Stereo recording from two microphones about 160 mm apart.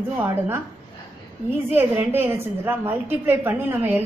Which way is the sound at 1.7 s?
10° right (ahead or behind).